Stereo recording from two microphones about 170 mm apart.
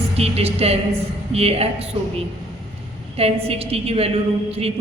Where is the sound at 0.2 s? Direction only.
35° right (ahead or behind).